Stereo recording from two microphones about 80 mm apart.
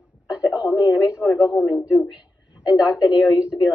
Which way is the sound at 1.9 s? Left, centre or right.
Centre.